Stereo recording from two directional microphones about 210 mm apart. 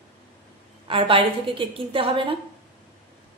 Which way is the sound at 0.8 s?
25° right (ahead or behind).